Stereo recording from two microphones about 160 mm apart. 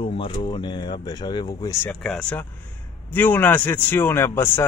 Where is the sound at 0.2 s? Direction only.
30° left (ahead or behind).